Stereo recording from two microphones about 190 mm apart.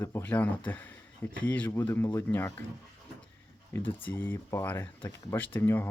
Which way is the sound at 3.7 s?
10° left (ahead or behind).